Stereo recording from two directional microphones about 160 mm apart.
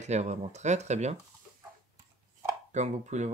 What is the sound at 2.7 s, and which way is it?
Speech, 45° right (ahead or behind).